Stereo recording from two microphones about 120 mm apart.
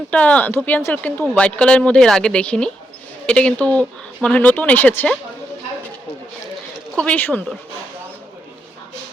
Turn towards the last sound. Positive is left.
turn(degrees=15)  # may be behind; listen again after turning